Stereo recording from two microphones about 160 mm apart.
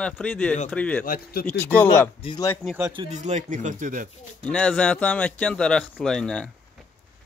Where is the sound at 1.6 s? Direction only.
10° left (ahead or behind).